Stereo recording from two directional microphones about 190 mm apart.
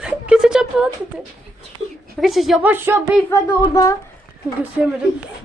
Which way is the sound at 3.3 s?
15° left (ahead or behind).